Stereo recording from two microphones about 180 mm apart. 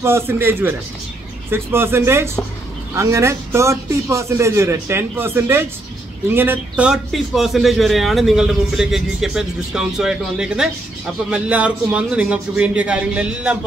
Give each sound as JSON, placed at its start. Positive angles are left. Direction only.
{"t": 0.0, "sound": "a man's voice", "side_deg": -15}